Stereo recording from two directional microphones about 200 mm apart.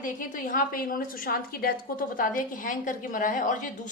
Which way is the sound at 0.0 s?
40° left (ahead or behind).